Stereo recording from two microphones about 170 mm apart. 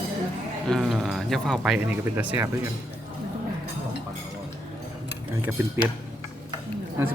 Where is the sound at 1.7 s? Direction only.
10° right (ahead or behind).